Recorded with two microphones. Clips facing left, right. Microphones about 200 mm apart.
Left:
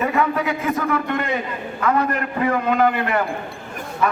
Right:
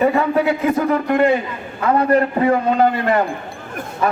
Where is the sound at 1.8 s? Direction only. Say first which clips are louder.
Right 6 dB; 30° right (ahead or behind).